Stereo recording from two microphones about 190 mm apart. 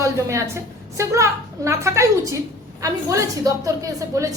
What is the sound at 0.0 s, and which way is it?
A woman's voice, 15° right (ahead or behind).